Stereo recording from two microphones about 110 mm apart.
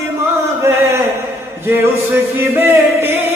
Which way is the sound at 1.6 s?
25° right (ahead or behind).